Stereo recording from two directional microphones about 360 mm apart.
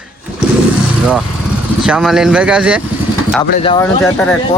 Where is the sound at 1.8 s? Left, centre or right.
Centre.